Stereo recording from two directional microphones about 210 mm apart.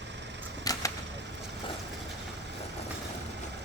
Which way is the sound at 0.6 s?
15° left (ahead or behind).